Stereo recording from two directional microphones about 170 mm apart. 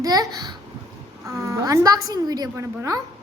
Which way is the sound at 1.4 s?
15° right (ahead or behind).